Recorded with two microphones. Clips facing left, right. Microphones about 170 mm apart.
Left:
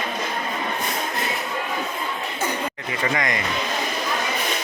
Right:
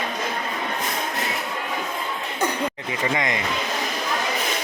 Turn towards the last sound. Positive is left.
turn(degrees=-15)  # may be behind; listen again after turning